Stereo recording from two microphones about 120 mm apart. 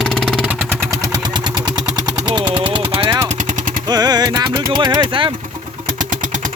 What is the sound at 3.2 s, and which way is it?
Vehicle, 90° right.